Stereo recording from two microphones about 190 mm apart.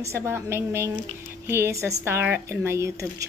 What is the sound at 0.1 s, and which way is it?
Speech, 15° right (ahead or behind).